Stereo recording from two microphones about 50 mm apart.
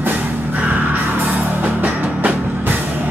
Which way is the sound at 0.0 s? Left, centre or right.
Right.